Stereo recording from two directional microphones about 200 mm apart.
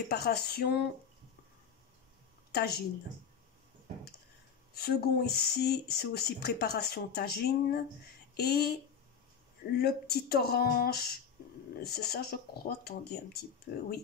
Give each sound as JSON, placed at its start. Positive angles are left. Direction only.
{"t": 0.1, "sound": "speech", "side_deg": 55}
{"t": 2.5, "sound": "a woman's voice", "side_deg": 50}
{"t": 4.7, "sound": "speech", "side_deg": 50}